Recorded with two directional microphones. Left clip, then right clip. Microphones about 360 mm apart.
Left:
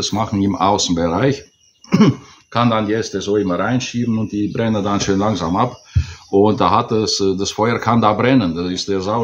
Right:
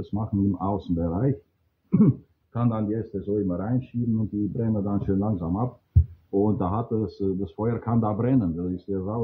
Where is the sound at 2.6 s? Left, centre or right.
Centre.